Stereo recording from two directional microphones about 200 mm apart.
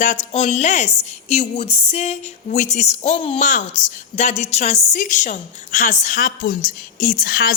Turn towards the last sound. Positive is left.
turn(degrees=45)  # may be behind; listen again after turning